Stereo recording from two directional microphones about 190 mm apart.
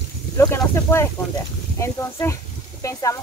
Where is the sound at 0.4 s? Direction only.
10° left (ahead or behind).